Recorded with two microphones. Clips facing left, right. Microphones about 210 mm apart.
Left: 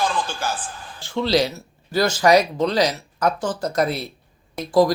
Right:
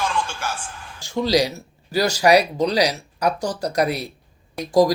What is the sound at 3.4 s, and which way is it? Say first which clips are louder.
Speech: even; 40° right (ahead or behind).